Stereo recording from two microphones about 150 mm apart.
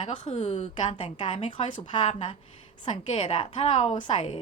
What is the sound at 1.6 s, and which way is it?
Speech, 50° left (ahead or behind).